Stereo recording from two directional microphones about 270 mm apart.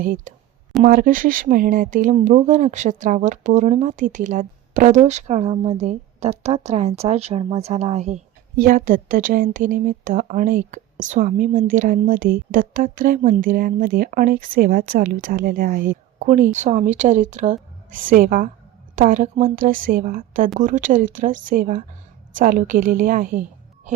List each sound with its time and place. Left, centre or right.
0.0 s a woman's voice: right